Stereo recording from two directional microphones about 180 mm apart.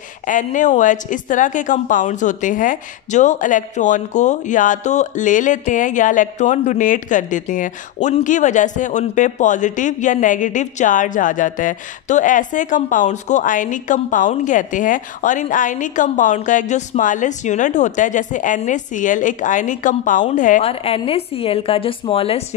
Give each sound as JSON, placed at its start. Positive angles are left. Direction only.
{"t": 0.3, "sound": "a woman's voice", "side_deg": 45}